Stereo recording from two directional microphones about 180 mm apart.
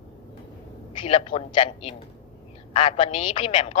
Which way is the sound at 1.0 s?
30° left (ahead or behind).